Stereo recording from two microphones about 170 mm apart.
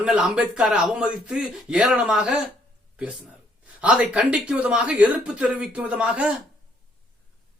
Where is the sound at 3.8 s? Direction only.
5° right (ahead or behind).